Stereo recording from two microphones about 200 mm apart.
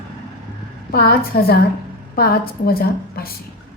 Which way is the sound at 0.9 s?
50° left (ahead or behind).